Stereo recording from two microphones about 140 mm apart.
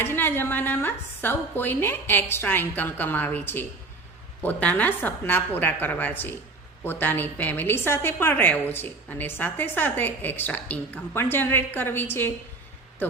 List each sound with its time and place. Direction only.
0.0 s a woman's voice: 15° left (ahead or behind)